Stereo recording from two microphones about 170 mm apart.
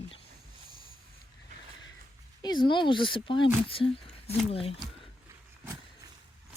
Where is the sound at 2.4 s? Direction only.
25° left (ahead or behind).